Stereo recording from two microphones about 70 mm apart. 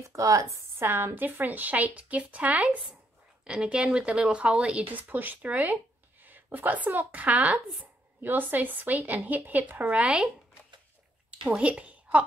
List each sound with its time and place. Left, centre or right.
0.0 s a woman's voice: right
0.8 s a woman's voice: right